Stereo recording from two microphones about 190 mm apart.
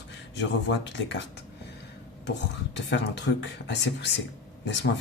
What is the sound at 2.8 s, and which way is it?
A man's voice, 65° left (ahead or behind).